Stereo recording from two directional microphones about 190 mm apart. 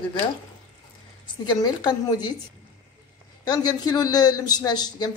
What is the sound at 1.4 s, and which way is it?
Speech, 20° left (ahead or behind).